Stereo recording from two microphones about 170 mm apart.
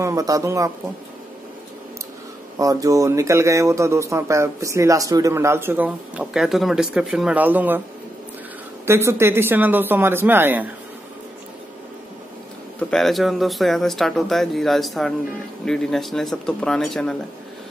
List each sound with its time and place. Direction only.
0.0 s speech: 20° right (ahead or behind)
2.6 s speech: 20° right (ahead or behind)
8.8 s speech: 15° right (ahead or behind)
12.9 s speech: centre (ahead or behind)